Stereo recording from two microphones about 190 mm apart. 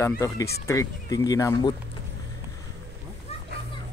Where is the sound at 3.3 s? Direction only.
35° left (ahead or behind).